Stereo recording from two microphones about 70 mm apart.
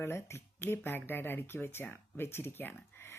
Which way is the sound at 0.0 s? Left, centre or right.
Left.